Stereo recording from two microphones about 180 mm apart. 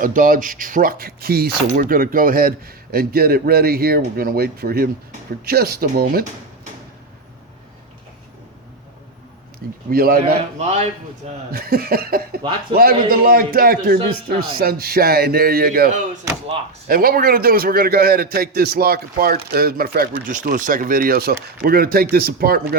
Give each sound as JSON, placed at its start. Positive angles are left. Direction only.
{"t": 0.0, "sound": "speech", "side_deg": -50}
{"t": 9.9, "sound": "speech", "side_deg": -55}
{"t": 10.6, "sound": "speech", "side_deg": -40}
{"t": 11.5, "sound": "speech", "side_deg": -55}